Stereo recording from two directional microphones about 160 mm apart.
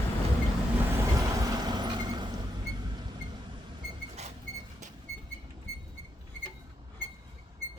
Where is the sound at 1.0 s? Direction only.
20° right (ahead or behind).